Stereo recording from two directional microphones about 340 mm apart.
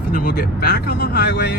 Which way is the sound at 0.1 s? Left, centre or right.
Left.